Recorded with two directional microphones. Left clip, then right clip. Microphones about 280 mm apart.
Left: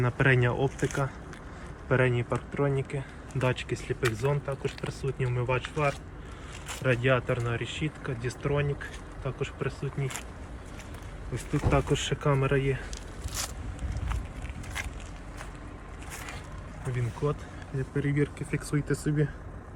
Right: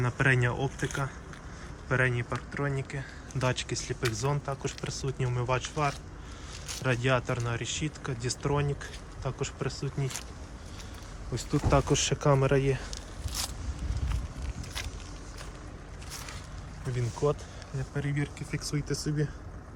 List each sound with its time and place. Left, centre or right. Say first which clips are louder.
0.0 s speech: left 2 dB; centre
11.7 s speech: right 1 dB; centre
18.0 s speech: left 7 dB; centre